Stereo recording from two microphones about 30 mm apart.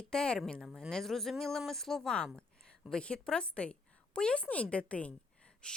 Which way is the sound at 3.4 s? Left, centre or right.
Left.